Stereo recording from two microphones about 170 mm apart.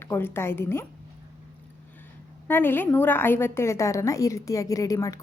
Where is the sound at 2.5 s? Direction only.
10° left (ahead or behind).